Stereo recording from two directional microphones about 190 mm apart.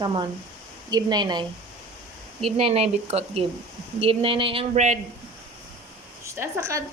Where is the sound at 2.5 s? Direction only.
30° right (ahead or behind).